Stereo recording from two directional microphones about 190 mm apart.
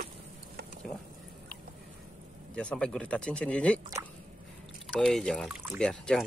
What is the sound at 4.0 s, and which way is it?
Drip, 20° right (ahead or behind).